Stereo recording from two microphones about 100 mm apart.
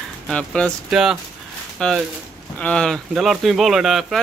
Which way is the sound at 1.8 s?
10° left (ahead or behind).